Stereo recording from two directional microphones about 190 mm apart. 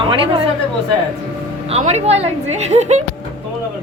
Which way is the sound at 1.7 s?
35° right (ahead or behind).